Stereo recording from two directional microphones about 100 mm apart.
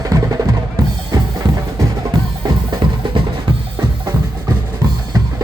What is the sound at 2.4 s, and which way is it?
Music, 45° right (ahead or behind).